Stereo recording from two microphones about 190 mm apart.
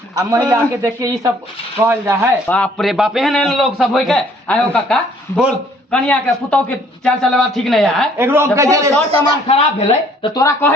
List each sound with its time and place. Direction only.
0.2 s a man's voice: 15° right (ahead or behind)
2.5 s a man's voice: 5° left (ahead or behind)
8.2 s a man's voice: 15° right (ahead or behind)
9.2 s speech: 30° left (ahead or behind)
10.2 s speech: 20° left (ahead or behind)